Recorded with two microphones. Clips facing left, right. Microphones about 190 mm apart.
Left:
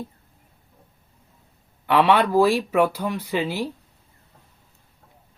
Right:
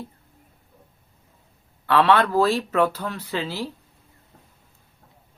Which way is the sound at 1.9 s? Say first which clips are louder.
Left 1 dB; 15° left (ahead or behind).